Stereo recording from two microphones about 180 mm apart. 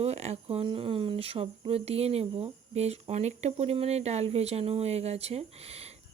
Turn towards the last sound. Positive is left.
turn(degrees=-35)  # may be behind; listen again after turning